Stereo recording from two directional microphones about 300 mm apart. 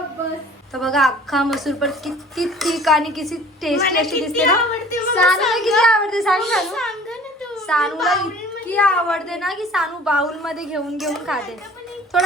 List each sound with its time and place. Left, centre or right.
0.7 s a woman's voice: centre
3.8 s a woman's voice: left
4.0 s a woman's voice: centre